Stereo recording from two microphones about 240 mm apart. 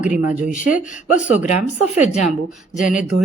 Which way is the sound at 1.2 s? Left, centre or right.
Centre.